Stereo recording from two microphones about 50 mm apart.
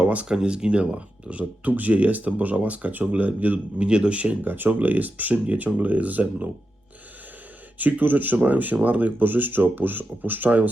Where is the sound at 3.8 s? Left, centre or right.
Centre.